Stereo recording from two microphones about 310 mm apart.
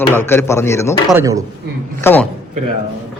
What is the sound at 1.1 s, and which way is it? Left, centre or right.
Speech, centre.